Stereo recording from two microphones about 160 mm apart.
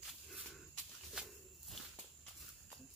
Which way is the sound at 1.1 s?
Centre (ahead or behind).